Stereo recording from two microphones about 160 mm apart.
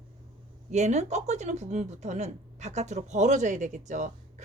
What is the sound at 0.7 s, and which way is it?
Speech, 45° right (ahead or behind).